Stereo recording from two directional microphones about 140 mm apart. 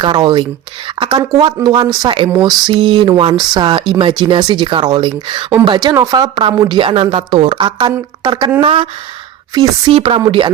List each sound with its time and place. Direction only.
0.0 s a woman's voice: 30° right (ahead or behind)
0.9 s a sound: 35° right (ahead or behind)
1.4 s a woman's voice: 35° right (ahead or behind)
8.6 s a woman's voice: 40° right (ahead or behind)